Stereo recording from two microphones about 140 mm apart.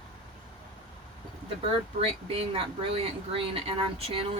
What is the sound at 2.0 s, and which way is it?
Speech, 45° right (ahead or behind).